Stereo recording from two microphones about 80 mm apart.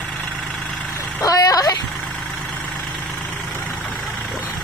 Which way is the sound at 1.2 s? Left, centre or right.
Left.